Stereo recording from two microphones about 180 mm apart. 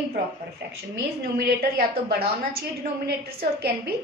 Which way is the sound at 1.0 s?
65° right (ahead or behind).